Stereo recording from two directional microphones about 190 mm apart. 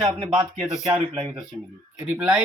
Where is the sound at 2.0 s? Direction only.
5° right (ahead or behind).